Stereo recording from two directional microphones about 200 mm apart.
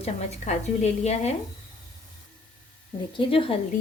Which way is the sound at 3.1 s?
25° left (ahead or behind).